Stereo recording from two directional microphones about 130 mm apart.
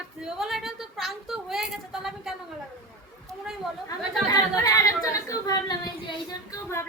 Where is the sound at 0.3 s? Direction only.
5° right (ahead or behind).